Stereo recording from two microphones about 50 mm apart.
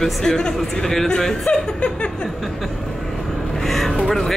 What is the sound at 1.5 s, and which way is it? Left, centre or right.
Speech, left.